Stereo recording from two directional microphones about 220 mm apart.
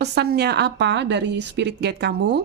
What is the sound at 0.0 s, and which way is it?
A woman's voice, 50° right (ahead or behind).